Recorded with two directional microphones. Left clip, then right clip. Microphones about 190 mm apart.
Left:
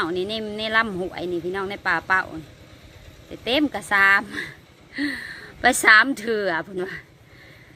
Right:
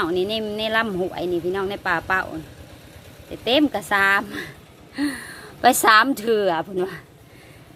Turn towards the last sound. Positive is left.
turn(degrees=-5)  # may be behind; listen again after turning